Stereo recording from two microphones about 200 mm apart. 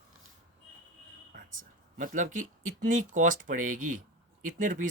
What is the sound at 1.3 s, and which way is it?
Speech, 40° right (ahead or behind).